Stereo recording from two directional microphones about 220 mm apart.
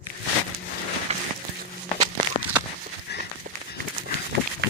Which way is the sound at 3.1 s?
50° left (ahead or behind).